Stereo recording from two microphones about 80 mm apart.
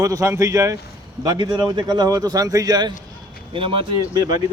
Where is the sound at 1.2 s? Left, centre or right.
Right.